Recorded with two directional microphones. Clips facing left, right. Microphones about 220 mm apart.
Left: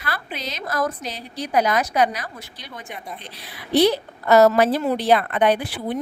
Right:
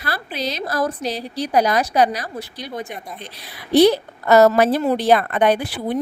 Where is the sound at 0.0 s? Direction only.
35° right (ahead or behind).